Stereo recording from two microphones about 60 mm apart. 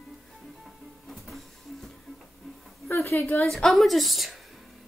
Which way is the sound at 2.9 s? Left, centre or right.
Left.